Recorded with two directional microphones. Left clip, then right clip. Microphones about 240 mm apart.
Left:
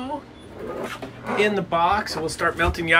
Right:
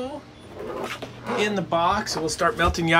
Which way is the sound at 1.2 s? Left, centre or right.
Centre.